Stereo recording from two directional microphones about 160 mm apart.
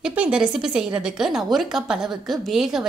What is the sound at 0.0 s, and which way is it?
A woman's voice, 5° right (ahead or behind).